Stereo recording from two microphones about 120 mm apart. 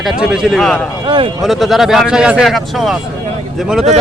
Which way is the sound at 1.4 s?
Centre (ahead or behind).